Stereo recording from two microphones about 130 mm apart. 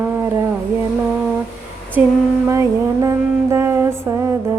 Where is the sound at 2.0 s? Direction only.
10° right (ahead or behind).